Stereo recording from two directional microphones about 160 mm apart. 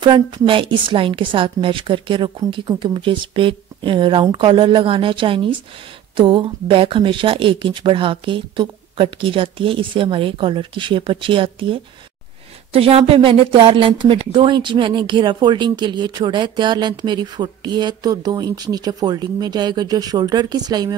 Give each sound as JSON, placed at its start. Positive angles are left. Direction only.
{"t": 0.0, "sound": "a woman's voice", "side_deg": -30}